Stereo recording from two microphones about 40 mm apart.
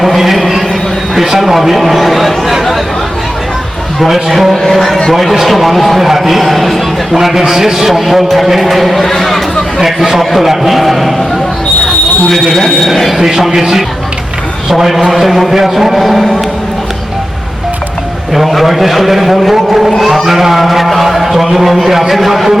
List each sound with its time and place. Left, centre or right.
0.0 s a sound: centre
4.0 s speech: centre
9.8 s speech: centre
12.3 s speech: centre
13.1 s a man's voice: centre
18.3 s speech: centre